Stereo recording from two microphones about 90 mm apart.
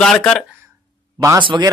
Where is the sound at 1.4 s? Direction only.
65° right (ahead or behind).